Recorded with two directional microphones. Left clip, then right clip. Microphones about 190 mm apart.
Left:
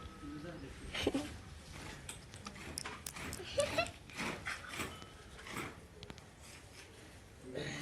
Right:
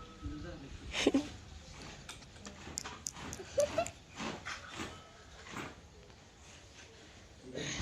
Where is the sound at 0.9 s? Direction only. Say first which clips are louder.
Right 5 dB; 35° right (ahead or behind).